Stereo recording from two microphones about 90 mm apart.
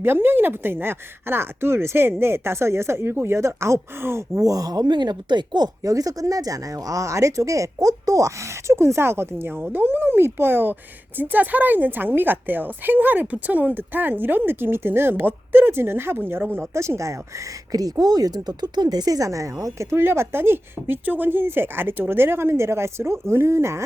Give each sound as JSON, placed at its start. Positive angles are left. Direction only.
{"t": 0.0, "sound": "a woman's voice", "side_deg": -25}
{"t": 5.5, "sound": "a woman's voice", "side_deg": -45}